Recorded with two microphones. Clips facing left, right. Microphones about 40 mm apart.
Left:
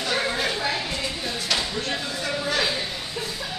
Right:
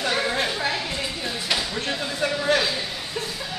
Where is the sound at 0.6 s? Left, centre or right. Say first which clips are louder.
Right 1 dB; centre.